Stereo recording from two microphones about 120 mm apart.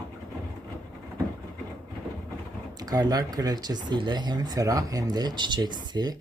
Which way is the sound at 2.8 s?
30° right (ahead or behind).